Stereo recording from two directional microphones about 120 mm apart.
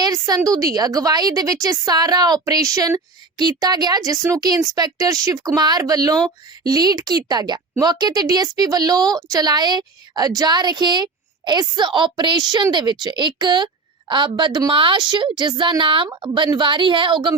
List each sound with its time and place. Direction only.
0.0 s a woman's voice: 30° right (ahead or behind)